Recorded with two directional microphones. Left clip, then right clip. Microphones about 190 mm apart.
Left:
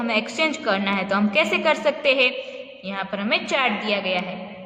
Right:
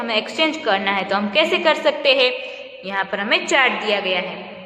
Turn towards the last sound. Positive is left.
turn(degrees=15)  # may be behind; listen again after turning